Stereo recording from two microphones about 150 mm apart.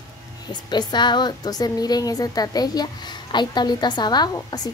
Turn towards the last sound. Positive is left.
turn(degrees=30)  # may be behind; listen again after turning